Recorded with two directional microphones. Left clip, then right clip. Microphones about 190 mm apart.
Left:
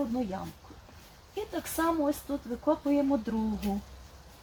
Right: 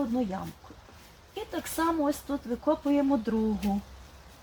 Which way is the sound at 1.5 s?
50° right (ahead or behind).